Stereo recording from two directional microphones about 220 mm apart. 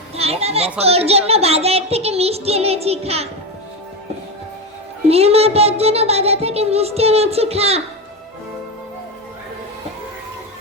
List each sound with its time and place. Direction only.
0.2 s a child's voice: 30° right (ahead or behind)
5.0 s a child's voice: 25° right (ahead or behind)